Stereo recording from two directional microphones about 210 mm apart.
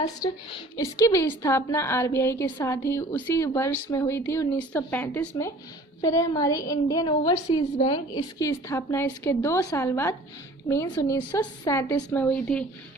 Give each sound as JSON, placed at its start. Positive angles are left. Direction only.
{"t": 0.0, "sound": "a woman's voice", "side_deg": 20}